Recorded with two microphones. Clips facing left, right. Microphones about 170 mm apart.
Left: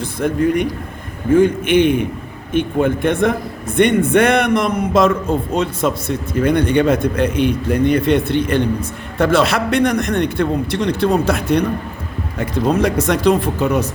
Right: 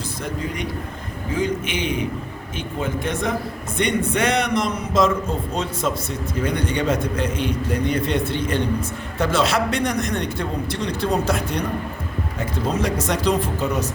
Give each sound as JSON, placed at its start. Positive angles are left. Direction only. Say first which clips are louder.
{"t": 0.2, "sound": "a man's voice", "louder": "left 13 dB", "side_deg": 55}
{"t": 12.7, "sound": "a man's voice", "louder": "left 6 dB", "side_deg": 60}